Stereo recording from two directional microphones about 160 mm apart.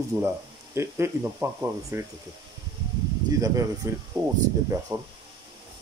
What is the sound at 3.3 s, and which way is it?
Speech, 20° right (ahead or behind).